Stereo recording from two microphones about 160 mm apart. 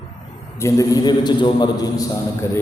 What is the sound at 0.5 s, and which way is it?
A man's voice, 20° left (ahead or behind).